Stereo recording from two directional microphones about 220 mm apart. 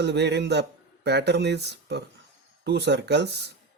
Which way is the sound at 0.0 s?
50° right (ahead or behind).